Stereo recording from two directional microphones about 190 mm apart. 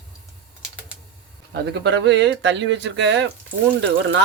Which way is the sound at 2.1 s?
65° right (ahead or behind).